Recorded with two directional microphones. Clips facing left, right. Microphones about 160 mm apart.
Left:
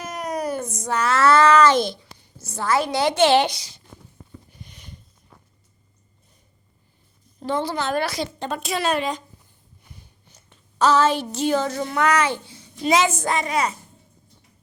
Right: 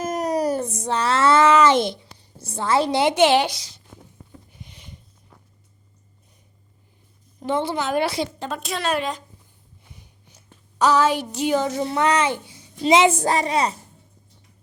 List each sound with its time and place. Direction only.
0.0 s a sound: 40° right (ahead or behind); by 3.5 s 15° right (ahead or behind)
3.5 s a woman's voice: centre (ahead or behind)
4.5 s a sound: 20° right (ahead or behind)
7.3 s speech: 20° right (ahead or behind)
7.8 s a woman's voice: 10° right (ahead or behind)
8.0 s a child's voice: 25° right (ahead or behind)
8.4 s a woman's voice: centre (ahead or behind)
10.3 s a woman's voice: 15° right (ahead or behind)
11.9 s a child's voice: 25° right (ahead or behind)